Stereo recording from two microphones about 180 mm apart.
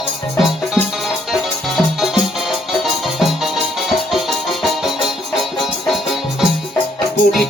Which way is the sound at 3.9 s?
Centre (ahead or behind).